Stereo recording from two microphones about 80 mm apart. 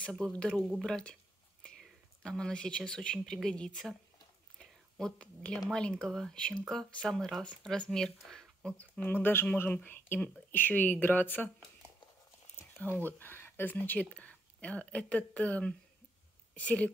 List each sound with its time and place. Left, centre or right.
0.2 s speech: centre
4.6 s a sound: centre
5.7 s speech: centre
8.3 s a sound: centre
8.7 s speech: left
12.9 s speech: left